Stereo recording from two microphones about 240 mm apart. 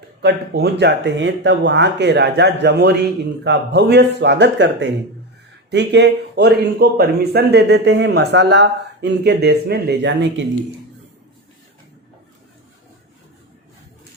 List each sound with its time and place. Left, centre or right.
0.2 s speech: right